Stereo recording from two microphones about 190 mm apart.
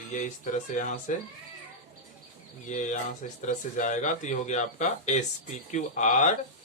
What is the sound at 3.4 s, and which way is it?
Speech, 40° left (ahead or behind).